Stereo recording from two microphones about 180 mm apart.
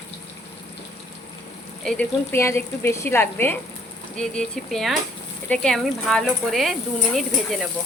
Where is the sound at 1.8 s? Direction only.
5° left (ahead or behind).